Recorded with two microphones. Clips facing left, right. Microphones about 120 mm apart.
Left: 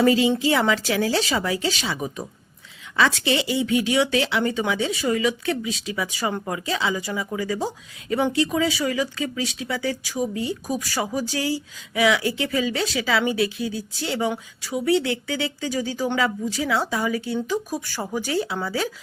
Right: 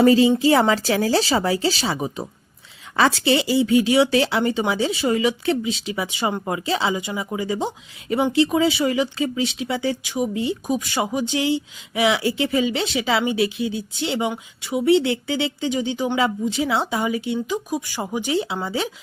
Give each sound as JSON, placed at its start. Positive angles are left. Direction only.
{"t": 0.0, "sound": "a woman's voice", "side_deg": -35}